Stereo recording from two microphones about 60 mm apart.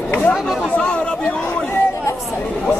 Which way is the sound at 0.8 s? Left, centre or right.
Centre.